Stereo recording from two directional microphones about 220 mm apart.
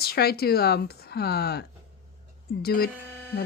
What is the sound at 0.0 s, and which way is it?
Speech, 45° left (ahead or behind).